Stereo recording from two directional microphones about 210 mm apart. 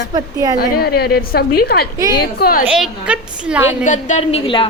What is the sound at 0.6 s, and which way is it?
A woman's voice, 45° left (ahead or behind).